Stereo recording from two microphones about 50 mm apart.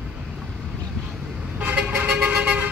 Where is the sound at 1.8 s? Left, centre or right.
Right.